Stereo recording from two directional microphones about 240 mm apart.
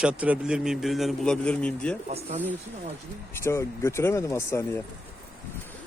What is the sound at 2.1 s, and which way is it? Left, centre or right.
Speech, right.